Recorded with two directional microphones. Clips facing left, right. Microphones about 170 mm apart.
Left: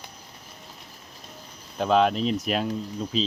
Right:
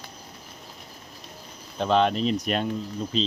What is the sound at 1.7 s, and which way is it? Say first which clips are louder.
Speech: left 1 dB; 5° left (ahead or behind).